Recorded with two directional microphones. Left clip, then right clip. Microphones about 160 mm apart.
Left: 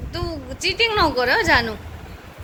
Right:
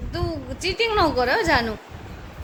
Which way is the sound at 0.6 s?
15° right (ahead or behind).